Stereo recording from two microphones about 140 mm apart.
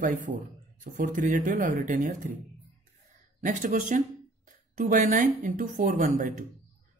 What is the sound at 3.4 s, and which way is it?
Speech, 65° right (ahead or behind).